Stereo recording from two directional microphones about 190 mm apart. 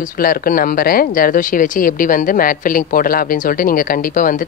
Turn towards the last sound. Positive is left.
turn(degrees=45)  # may be behind; listen again after turning